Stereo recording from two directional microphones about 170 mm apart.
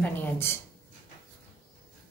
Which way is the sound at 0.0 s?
10° left (ahead or behind).